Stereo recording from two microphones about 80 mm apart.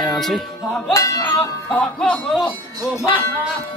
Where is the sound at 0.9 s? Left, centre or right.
Left.